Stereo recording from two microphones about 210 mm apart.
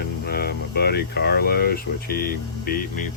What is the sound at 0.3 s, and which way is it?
Speech, 50° left (ahead or behind).